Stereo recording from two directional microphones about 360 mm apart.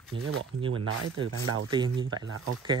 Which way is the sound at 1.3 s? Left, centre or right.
Right.